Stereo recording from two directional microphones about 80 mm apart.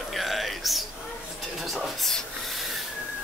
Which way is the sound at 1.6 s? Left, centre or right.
Centre.